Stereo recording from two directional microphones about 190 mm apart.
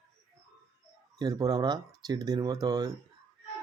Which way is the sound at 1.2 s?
20° right (ahead or behind).